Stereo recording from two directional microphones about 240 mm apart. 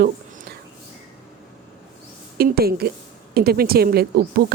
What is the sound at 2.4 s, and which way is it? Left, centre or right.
Speech, right.